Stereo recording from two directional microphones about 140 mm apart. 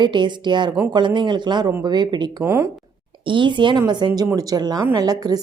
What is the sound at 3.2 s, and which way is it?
A woman's voice, 35° right (ahead or behind).